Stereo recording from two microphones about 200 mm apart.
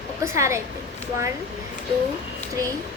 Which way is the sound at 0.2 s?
15° right (ahead or behind).